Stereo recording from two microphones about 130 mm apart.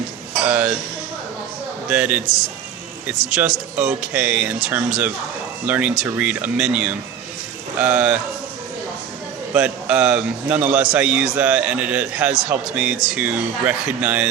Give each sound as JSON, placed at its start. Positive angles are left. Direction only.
{"t": 0.4, "sound": "a man's voice", "side_deg": -10}
{"t": 1.9, "sound": "a man's voice", "side_deg": -10}
{"t": 2.2, "sound": "a man's voice", "side_deg": 25}
{"t": 3.8, "sound": "a man's voice", "side_deg": -10}
{"t": 9.5, "sound": "a man's voice", "side_deg": -10}